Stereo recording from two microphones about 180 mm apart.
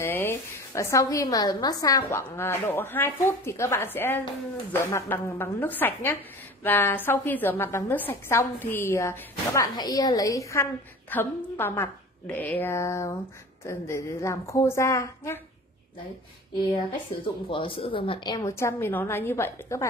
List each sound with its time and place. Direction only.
0.0 s a woman's voice: 15° left (ahead or behind)
17.5 s a woman's voice: 30° left (ahead or behind)